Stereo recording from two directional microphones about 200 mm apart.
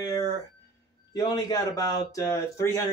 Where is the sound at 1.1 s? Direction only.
20° left (ahead or behind).